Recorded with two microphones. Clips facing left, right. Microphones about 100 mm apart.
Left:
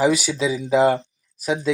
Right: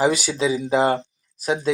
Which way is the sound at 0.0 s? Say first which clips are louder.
Left 1 dB; centre (ahead or behind).